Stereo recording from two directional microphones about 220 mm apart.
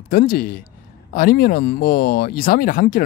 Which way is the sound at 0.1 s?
40° left (ahead or behind).